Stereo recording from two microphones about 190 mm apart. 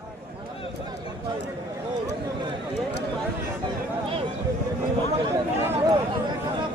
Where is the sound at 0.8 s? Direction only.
20° right (ahead or behind).